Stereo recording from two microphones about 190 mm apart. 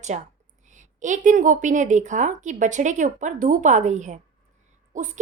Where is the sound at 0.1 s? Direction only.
40° right (ahead or behind).